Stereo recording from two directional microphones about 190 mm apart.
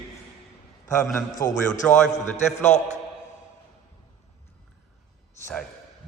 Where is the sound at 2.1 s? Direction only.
40° left (ahead or behind).